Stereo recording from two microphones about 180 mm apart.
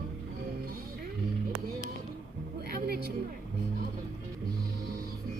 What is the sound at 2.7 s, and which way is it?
Music, 60° right (ahead or behind).